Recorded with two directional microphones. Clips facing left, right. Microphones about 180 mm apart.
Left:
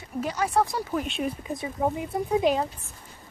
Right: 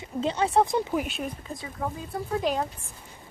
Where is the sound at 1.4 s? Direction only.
20° left (ahead or behind).